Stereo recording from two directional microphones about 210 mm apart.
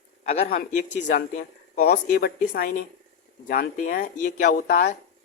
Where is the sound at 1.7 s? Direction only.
45° left (ahead or behind).